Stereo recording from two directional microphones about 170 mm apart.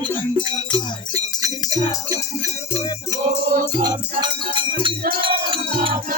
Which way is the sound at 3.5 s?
55° right (ahead or behind).